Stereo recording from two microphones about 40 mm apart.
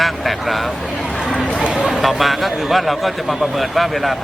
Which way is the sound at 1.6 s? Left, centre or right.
Centre.